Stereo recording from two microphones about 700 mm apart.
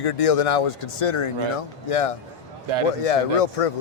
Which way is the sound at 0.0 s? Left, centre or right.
Left.